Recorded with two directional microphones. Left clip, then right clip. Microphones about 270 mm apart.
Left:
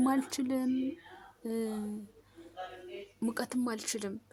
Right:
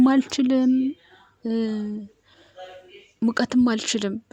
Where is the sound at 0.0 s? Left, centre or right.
Left.